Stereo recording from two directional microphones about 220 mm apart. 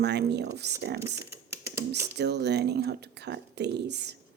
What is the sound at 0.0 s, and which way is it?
Speech, 50° right (ahead or behind).